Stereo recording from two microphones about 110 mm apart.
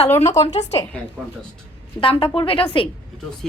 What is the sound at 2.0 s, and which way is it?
Speech, 55° left (ahead or behind).